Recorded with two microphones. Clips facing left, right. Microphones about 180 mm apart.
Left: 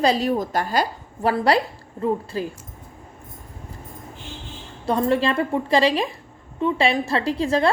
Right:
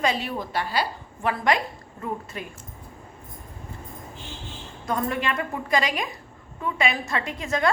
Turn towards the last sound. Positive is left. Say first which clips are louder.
# left 5 dB
turn(degrees=30)  # may be behind; listen again after turning